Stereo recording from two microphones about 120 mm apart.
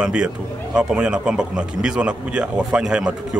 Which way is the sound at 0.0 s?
10° right (ahead or behind).